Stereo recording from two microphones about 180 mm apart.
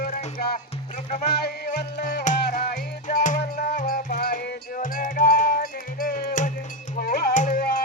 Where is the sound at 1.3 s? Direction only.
60° left (ahead or behind).